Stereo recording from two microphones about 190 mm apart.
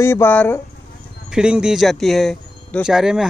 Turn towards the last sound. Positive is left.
turn(degrees=0)  # may be behind; listen again after turning